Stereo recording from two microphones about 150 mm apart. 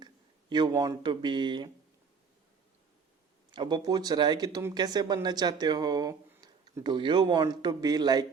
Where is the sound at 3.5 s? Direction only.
30° right (ahead or behind).